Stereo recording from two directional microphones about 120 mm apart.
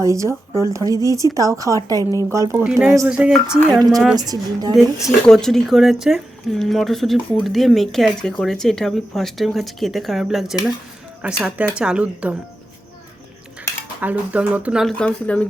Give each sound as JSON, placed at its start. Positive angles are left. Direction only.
{"t": 0.0, "sound": "speech", "side_deg": -25}
{"t": 2.6, "sound": "speech", "side_deg": -5}
{"t": 4.2, "sound": "a woman's voice", "side_deg": -35}
{"t": 4.7, "sound": "speech", "side_deg": -5}
{"t": 14.0, "sound": "speech", "side_deg": -10}
{"t": 14.8, "sound": "speech", "side_deg": 10}